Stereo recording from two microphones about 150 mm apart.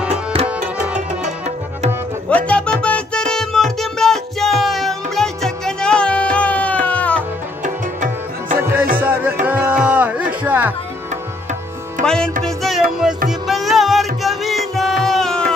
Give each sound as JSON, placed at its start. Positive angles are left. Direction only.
{"t": 0.1, "sound": "tabla", "side_deg": -45}
{"t": 0.5, "sound": "tabla", "side_deg": -5}
{"t": 2.2, "sound": "music", "side_deg": 10}
{"t": 7.6, "sound": "tabla", "side_deg": -55}
{"t": 9.0, "sound": "music", "side_deg": -10}
{"t": 12.0, "sound": "music", "side_deg": -55}
{"t": 12.4, "sound": "music", "side_deg": 0}